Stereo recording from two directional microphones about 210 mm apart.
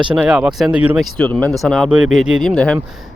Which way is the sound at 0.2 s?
5° right (ahead or behind).